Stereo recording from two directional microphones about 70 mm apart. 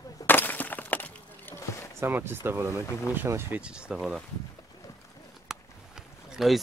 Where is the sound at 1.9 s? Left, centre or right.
Right.